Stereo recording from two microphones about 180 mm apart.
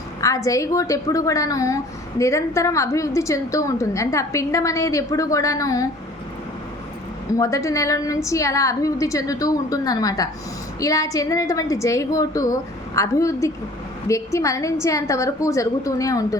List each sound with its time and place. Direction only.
0.2 s a woman's voice: 20° left (ahead or behind)
7.3 s a woman's voice: 15° left (ahead or behind)